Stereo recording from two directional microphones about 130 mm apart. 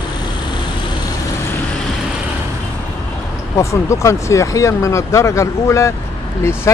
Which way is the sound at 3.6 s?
25° left (ahead or behind).